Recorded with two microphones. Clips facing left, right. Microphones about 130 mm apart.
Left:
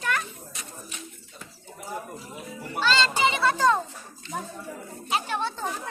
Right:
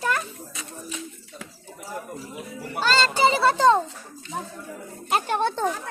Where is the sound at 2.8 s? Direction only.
40° right (ahead or behind).